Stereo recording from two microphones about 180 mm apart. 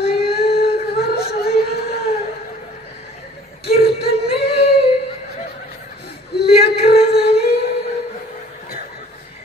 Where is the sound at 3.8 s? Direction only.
60° left (ahead or behind).